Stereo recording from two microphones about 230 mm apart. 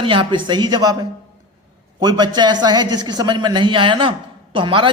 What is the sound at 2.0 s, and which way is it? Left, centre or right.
A woman's voice, centre.